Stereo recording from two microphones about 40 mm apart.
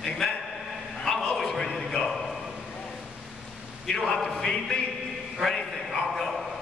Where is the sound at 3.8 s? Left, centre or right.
Centre.